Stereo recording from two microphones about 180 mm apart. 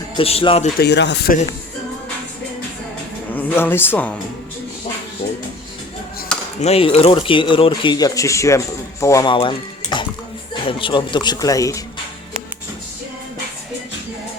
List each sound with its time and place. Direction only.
0.2 s speech: 30° left (ahead or behind)
0.8 s speech: 70° left (ahead or behind)
3.3 s speech: 10° left (ahead or behind)
6.6 s speech: 35° left (ahead or behind); by 9.3 s 15° left (ahead or behind)
9.3 s speech: 25° left (ahead or behind)